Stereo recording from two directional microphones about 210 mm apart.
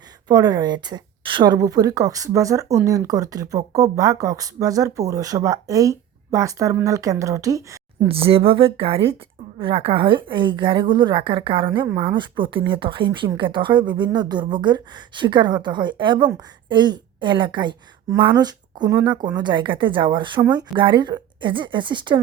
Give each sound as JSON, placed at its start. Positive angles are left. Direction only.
{"t": 0.3, "sound": "speech", "side_deg": -20}
{"t": 8.0, "sound": "speech", "side_deg": -25}